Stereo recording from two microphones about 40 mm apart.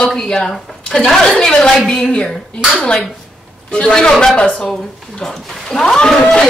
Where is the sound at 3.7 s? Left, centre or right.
Left.